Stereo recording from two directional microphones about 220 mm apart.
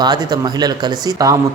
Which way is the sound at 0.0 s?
20° right (ahead or behind).